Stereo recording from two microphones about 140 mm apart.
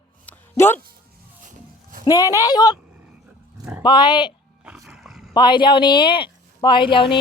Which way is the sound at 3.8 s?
35° left (ahead or behind).